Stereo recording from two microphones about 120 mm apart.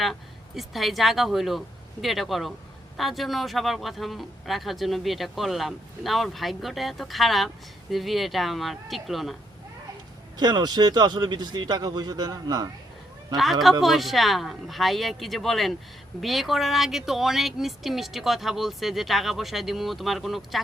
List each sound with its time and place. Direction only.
0.0 s speech: centre (ahead or behind)
10.3 s a man's voice: 35° right (ahead or behind)
13.3 s speech: centre (ahead or behind)